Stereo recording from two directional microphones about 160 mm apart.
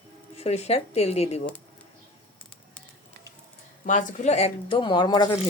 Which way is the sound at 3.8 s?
55° left (ahead or behind).